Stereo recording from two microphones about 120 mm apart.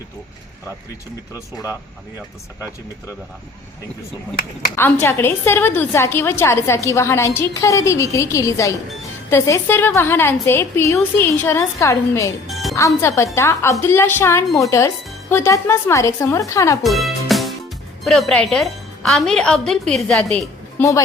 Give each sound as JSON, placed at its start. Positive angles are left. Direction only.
{"t": 4.8, "sound": "a woman's voice", "side_deg": 20}
{"t": 16.8, "sound": "music", "side_deg": 0}
{"t": 18.0, "sound": "a woman's voice", "side_deg": 0}
{"t": 20.7, "sound": "a woman's voice", "side_deg": 25}